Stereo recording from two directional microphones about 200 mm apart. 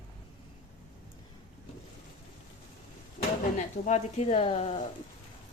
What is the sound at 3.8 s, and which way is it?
Speech, 35° left (ahead or behind).